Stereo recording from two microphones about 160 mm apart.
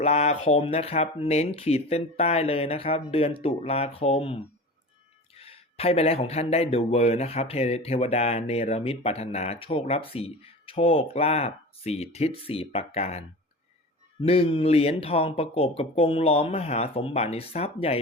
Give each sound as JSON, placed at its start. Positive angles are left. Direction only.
{"t": 0.0, "sound": "speech", "side_deg": 40}